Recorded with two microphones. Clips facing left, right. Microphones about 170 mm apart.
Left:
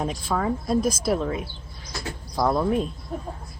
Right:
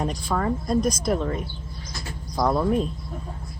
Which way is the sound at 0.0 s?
Centre (ahead or behind).